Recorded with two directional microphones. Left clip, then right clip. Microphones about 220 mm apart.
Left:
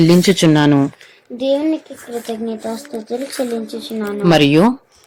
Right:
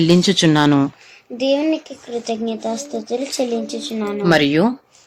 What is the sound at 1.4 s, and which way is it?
Speech, 15° left (ahead or behind).